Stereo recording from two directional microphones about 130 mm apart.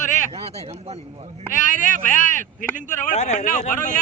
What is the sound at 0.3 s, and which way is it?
Speech, 50° right (ahead or behind).